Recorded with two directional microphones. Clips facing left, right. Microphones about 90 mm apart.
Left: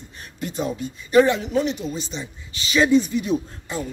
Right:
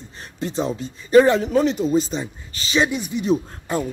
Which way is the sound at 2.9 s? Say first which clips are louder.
Left 8 dB; 15° right (ahead or behind).